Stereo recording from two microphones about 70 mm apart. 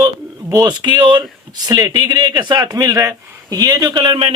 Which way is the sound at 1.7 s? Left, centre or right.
Right.